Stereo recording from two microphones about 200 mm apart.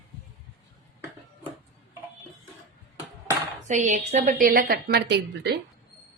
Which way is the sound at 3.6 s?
35° right (ahead or behind).